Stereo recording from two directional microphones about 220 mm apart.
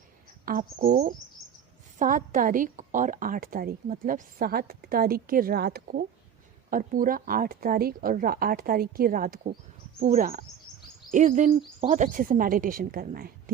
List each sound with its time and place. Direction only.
0.4 s a woman's voice: 40° right (ahead or behind)